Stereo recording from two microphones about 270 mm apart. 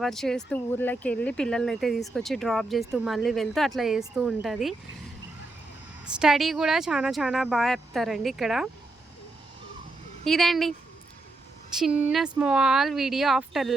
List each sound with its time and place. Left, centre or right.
0.0 s speech: centre
6.1 s speech: centre
10.2 s speech: centre
11.8 s speech: centre